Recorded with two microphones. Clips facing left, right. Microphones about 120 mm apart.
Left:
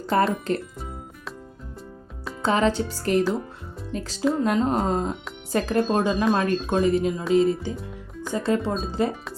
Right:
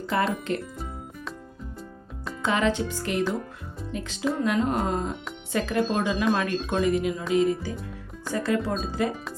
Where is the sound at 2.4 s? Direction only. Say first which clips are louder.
Left 3 dB; 35° left (ahead or behind).